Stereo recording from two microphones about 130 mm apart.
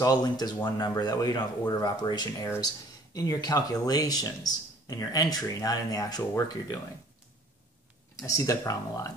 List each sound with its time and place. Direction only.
0.0 s speech: 30° left (ahead or behind)
8.2 s speech: 25° left (ahead or behind)